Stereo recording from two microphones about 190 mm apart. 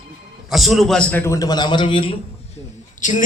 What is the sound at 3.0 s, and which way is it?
Speech, 40° left (ahead or behind).